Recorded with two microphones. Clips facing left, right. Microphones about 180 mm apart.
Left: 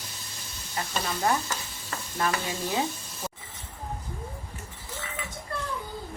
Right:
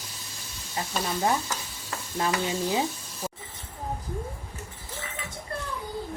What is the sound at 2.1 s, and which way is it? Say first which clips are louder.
Stir: right 2 dB; 20° right (ahead or behind).